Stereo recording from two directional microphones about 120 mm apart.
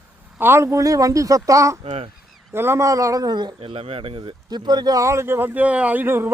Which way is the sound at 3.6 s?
55° right (ahead or behind).